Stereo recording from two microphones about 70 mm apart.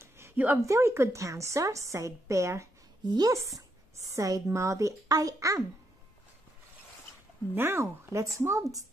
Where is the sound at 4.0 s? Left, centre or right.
Right.